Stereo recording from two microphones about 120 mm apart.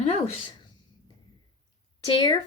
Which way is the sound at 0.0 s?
50° left (ahead or behind).